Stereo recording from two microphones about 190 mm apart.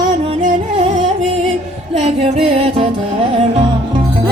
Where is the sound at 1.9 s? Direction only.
35° right (ahead or behind).